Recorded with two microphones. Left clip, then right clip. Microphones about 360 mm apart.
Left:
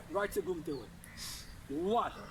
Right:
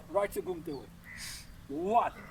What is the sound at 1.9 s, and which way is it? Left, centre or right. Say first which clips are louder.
Speech: right 5 dB; right.